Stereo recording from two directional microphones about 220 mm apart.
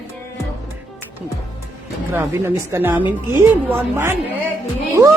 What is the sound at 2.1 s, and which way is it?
Speech, 10° right (ahead or behind).